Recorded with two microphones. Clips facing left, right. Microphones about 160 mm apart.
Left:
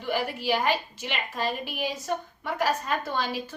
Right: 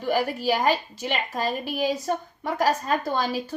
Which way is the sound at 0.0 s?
40° right (ahead or behind).